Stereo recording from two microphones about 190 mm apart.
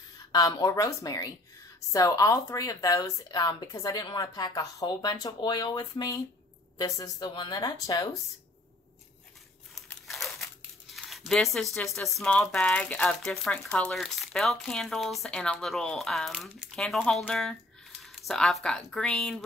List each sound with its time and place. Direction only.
0.3 s speech: 20° left (ahead or behind)
10.0 s speech: centre (ahead or behind)